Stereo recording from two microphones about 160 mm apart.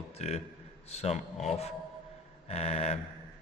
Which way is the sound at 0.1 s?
40° left (ahead or behind).